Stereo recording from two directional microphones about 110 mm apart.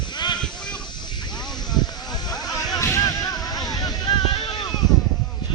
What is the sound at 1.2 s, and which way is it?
Music, 40° left (ahead or behind).